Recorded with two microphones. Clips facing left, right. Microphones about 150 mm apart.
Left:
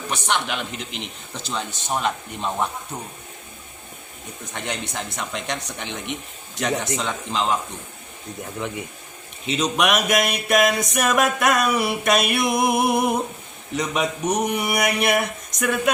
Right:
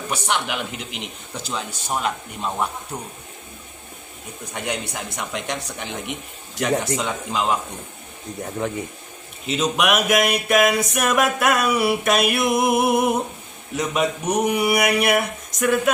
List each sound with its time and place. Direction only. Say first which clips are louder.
0.1 s speech: even; 5° right (ahead or behind)
4.5 s speech: right 2 dB; 5° right (ahead or behind)
8.6 s speech: right 4 dB; 45° right (ahead or behind)
9.5 s speech: right 1 dB; 5° right (ahead or behind)